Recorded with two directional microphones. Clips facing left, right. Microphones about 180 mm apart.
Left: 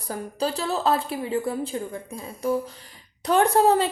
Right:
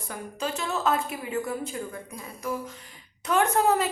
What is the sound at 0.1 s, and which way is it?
A woman's voice, 35° left (ahead or behind).